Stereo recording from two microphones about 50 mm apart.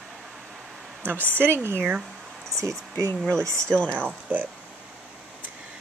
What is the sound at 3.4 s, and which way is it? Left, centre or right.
Speech, right.